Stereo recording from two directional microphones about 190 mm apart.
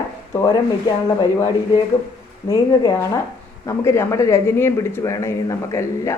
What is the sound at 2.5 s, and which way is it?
Speech, 15° left (ahead or behind).